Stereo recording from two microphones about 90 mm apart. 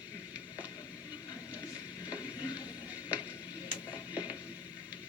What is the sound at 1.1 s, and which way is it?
Music, 15° right (ahead or behind).